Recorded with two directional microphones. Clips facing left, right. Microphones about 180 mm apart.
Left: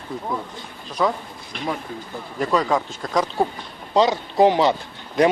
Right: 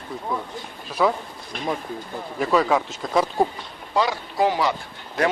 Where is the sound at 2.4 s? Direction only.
5° right (ahead or behind).